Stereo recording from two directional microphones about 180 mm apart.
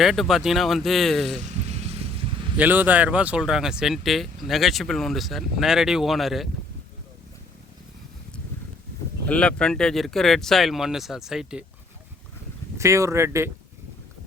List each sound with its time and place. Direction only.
0.0 s speech: centre (ahead or behind)
1.4 s vehicle: 35° right (ahead or behind)
2.6 s speech: 10° right (ahead or behind)
9.2 s speech: 5° left (ahead or behind)
12.7 s speech: 15° right (ahead or behind)